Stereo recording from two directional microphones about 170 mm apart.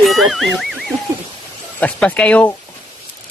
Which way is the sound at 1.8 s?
5° left (ahead or behind).